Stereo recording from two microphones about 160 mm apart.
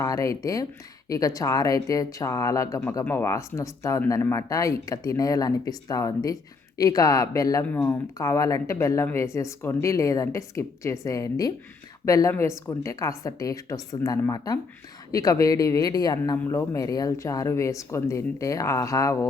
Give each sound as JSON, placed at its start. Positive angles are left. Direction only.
{"t": 0.0, "sound": "speech", "side_deg": 20}